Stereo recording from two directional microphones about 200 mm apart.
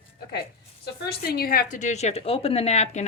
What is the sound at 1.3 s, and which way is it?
Speech, 45° left (ahead or behind).